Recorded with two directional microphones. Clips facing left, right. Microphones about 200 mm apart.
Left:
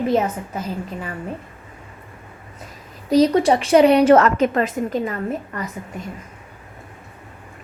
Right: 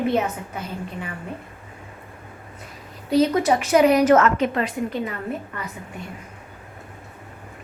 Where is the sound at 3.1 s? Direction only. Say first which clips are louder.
Left 3 dB; 35° left (ahead or behind).